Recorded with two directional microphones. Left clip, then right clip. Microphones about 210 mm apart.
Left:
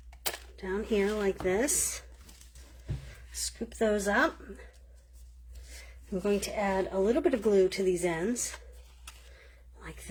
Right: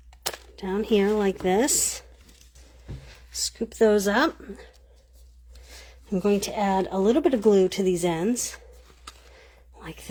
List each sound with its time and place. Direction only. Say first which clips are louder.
0.5 s speech: right 7 dB; 40° right (ahead or behind)
3.6 s speech: right 9 dB; 55° right (ahead or behind)
6.1 s speech: right 6 dB; 45° right (ahead or behind)
9.7 s a sound: right 6 dB; 40° right (ahead or behind)